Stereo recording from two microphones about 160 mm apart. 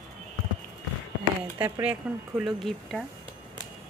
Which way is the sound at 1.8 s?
5° right (ahead or behind).